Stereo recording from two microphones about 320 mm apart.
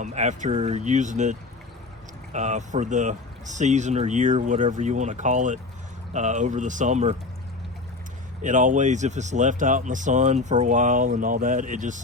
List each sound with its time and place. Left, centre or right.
0.0 s speech: right
8.4 s speech: right